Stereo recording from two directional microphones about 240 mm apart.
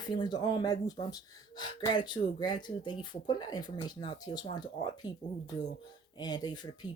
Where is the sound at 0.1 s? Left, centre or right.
Centre.